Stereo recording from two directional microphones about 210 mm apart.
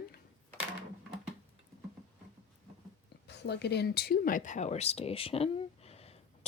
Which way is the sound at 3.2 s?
55° left (ahead or behind).